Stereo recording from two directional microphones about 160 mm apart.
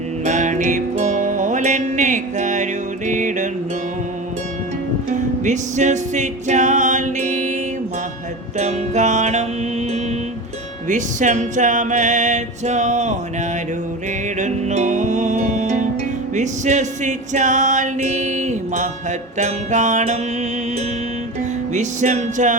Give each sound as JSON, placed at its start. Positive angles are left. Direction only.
{"t": 0.3, "sound": "music", "side_deg": -50}
{"t": 5.4, "sound": "music", "side_deg": -50}
{"t": 8.5, "sound": "music", "side_deg": -45}
{"t": 10.8, "sound": "music", "side_deg": -50}
{"t": 14.3, "sound": "music", "side_deg": -45}
{"t": 21.7, "sound": "music", "side_deg": -50}